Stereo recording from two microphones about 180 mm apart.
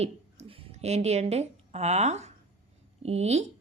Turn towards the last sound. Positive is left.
turn(degrees=-35)  # may be behind; listen again after turning